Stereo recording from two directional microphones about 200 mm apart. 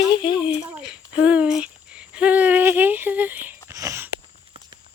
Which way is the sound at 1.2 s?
5° right (ahead or behind).